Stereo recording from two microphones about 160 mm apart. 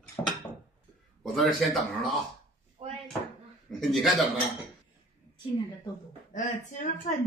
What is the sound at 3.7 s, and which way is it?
Speech, centre (ahead or behind).